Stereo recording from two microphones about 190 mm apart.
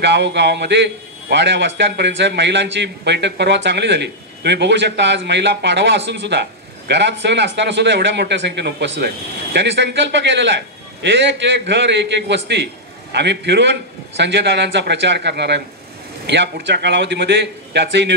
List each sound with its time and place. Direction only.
0.0 s a man's voice: 65° right (ahead or behind)